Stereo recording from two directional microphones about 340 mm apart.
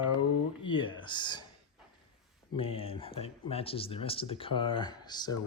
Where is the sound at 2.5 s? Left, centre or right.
Centre.